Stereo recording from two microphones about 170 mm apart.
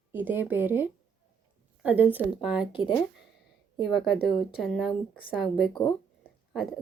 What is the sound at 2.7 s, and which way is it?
Speech, 30° left (ahead or behind).